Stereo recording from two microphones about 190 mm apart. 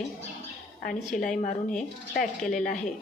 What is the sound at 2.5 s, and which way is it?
Speech, 45° left (ahead or behind).